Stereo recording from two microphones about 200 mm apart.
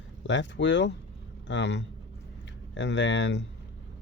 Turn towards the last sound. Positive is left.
turn(degrees=65)  # may be behind; listen again after turning